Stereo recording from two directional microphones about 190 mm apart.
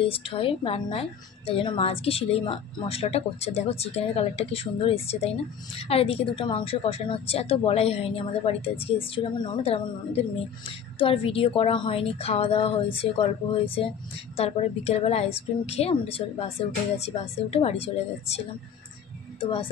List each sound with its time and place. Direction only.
0.0 s a woman's voice: 30° left (ahead or behind)
11.0 s a woman's voice: 30° left (ahead or behind)